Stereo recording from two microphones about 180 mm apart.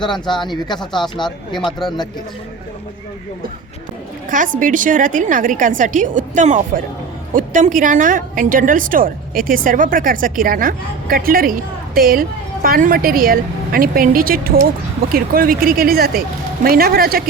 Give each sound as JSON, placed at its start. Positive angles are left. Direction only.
{"t": 0.0, "sound": "speech", "side_deg": 25}
{"t": 4.3, "sound": "a woman's voice", "side_deg": -45}